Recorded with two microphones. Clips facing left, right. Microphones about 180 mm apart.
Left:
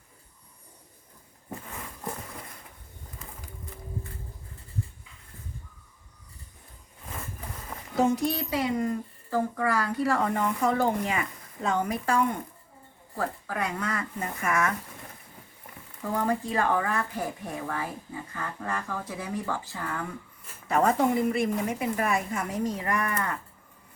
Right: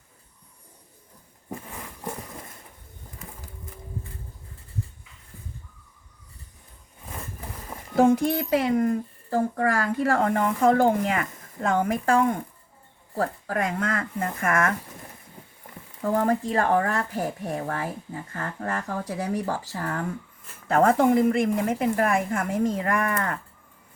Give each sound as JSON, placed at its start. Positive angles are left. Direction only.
{"t": 7.9, "sound": "speech", "side_deg": -50}
{"t": 16.0, "sound": "speech", "side_deg": -45}
{"t": 20.7, "sound": "speech", "side_deg": -55}